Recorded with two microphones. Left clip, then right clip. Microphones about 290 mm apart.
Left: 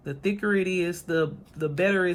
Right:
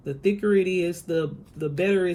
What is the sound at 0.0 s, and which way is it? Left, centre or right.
Speech, centre.